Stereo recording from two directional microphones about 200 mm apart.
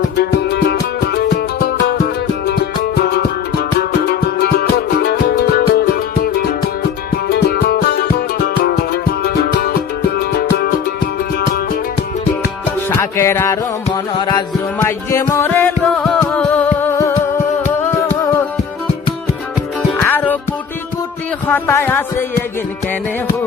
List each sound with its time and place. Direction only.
0.2 s music: 55° left (ahead or behind)
13.0 s music: 10° left (ahead or behind)
20.0 s music: 10° left (ahead or behind)
21.4 s speech: 10° left (ahead or behind)